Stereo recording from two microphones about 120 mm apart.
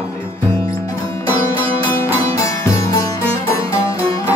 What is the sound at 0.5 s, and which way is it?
Music, 30° left (ahead or behind).